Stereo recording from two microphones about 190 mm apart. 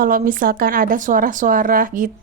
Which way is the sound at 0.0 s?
45° right (ahead or behind).